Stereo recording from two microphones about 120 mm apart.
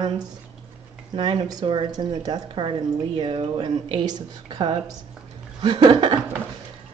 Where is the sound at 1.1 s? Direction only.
40° right (ahead or behind).